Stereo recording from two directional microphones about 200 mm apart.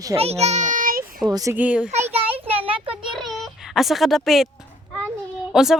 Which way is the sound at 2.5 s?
30° right (ahead or behind).